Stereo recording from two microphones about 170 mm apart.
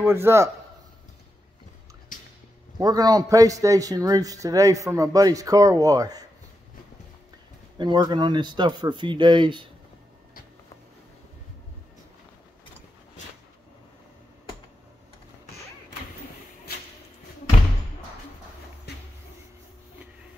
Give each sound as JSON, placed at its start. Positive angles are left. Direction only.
{"t": 0.0, "sound": "a man's voice", "side_deg": -15}
{"t": 2.1, "sound": "a sound", "side_deg": 50}
{"t": 2.8, "sound": "a man's voice", "side_deg": -20}
{"t": 7.7, "sound": "a man's voice", "side_deg": -25}